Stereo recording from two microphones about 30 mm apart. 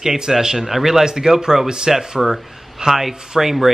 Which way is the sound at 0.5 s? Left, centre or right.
Centre.